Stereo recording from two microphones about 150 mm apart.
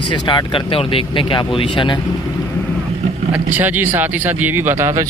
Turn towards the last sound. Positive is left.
turn(degrees=-20)  # may be behind; listen again after turning